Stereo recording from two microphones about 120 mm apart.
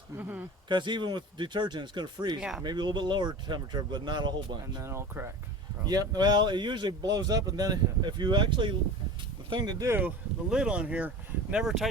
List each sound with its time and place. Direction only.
0.2 s speech: 15° right (ahead or behind)
0.7 s speech: 40° right (ahead or behind)
2.4 s speech: 5° right (ahead or behind)
2.6 s speech: 40° right (ahead or behind)
4.8 s speech: 20° right (ahead or behind)
5.8 s speech: 35° right (ahead or behind)
10.5 s speech: 10° right (ahead or behind)